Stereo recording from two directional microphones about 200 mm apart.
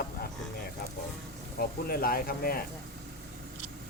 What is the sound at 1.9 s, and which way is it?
Speech, 50° left (ahead or behind).